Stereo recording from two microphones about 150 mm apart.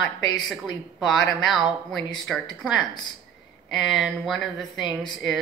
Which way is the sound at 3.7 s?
Centre (ahead or behind).